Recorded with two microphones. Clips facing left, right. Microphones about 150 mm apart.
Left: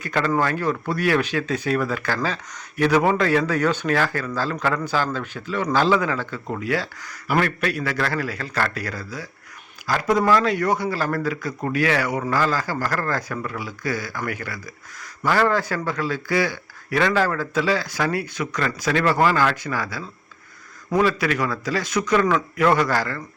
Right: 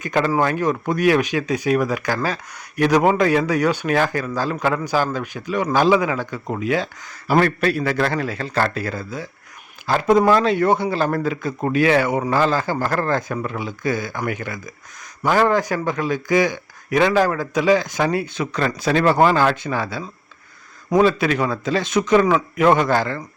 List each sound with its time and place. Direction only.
0.0 s a man's voice: 20° right (ahead or behind)